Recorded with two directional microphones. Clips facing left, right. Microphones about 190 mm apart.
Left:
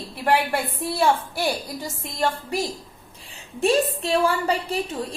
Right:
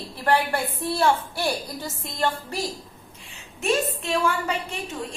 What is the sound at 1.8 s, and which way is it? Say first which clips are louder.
Speech: left 2 dB; 15° left (ahead or behind).